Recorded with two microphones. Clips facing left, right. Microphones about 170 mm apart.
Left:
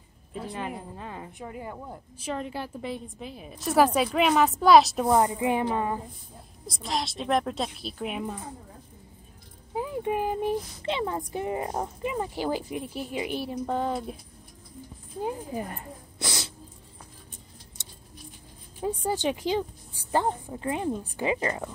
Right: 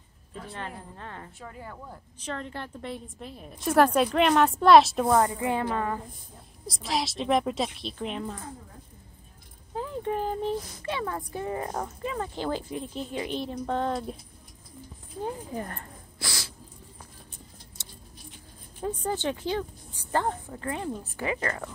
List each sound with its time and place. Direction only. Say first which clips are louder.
0.5 s a woman's voice: left 4 dB; 15° left (ahead or behind)
5.1 s speech: left 2 dB; 20° left (ahead or behind)
6.7 s a woman's voice: right 1 dB; centre (ahead or behind)
9.8 s speech: left 2 dB; 10° left (ahead or behind)
15.2 s speech: left 2 dB; 10° left (ahead or behind)
18.8 s speech: left 2 dB; 15° left (ahead or behind)